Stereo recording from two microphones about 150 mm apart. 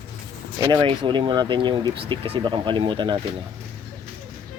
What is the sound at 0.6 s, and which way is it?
Speech, 30° right (ahead or behind).